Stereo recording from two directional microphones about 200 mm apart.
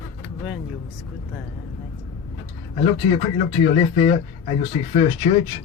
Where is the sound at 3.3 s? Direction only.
30° left (ahead or behind).